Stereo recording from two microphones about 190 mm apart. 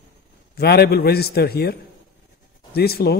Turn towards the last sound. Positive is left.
turn(degrees=55)  # may be behind; listen again after turning